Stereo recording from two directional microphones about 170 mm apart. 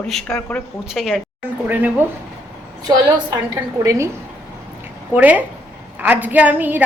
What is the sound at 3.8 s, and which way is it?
Speech, 20° right (ahead or behind).